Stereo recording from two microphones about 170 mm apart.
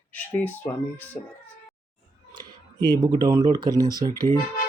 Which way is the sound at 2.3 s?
25° right (ahead or behind).